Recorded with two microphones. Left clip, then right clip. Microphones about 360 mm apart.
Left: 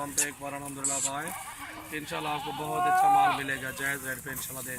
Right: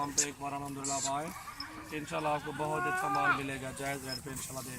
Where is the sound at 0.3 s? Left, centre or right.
Centre.